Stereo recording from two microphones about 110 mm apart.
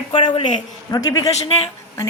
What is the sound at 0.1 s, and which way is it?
Speech, 50° left (ahead or behind).